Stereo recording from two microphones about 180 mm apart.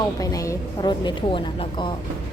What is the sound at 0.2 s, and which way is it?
A woman's voice, 20° left (ahead or behind).